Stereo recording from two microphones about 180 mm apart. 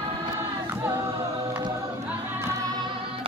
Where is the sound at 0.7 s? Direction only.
10° right (ahead or behind).